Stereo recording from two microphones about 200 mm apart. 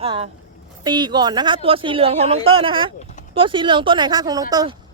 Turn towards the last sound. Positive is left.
turn(degrees=-20)  # may be behind; listen again after turning